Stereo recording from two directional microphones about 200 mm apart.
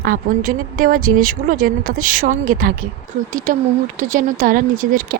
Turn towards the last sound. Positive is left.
turn(degrees=-45)  # may be behind; listen again after turning